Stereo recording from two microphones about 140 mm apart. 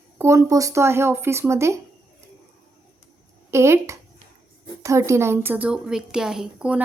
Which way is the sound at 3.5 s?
20° right (ahead or behind).